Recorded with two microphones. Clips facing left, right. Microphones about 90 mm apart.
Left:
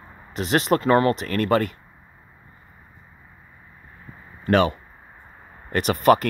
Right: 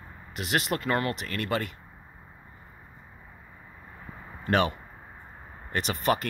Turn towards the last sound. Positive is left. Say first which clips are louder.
# left 9 dB
turn(degrees=55)  # may be behind; listen again after turning